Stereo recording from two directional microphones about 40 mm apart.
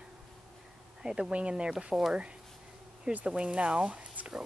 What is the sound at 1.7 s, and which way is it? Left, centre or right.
Speech, centre.